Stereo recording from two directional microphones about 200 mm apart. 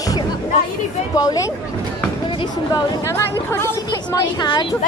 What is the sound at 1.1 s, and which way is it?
Speech, 20° left (ahead or behind).